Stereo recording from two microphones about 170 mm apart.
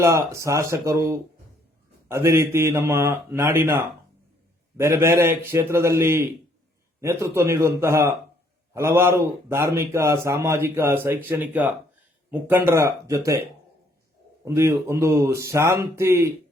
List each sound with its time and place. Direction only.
0.0 s a man's voice: 15° right (ahead or behind)
4.8 s a man's voice: 15° right (ahead or behind)
14.4 s a man's voice: 15° right (ahead or behind)